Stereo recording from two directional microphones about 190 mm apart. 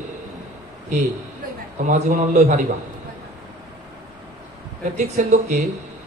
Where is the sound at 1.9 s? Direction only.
40° right (ahead or behind).